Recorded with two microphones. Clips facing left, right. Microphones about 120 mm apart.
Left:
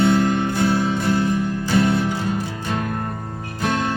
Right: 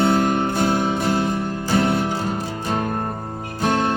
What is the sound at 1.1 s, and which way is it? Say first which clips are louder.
Music: left 1 dB; 25° right (ahead or behind).